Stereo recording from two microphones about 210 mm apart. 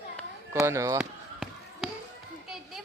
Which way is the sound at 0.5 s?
15° right (ahead or behind).